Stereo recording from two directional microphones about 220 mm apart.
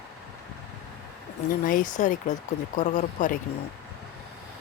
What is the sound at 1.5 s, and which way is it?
Speech, 40° left (ahead or behind).